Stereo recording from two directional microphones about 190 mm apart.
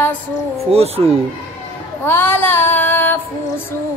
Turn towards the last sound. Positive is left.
turn(degrees=10)  # may be behind; listen again after turning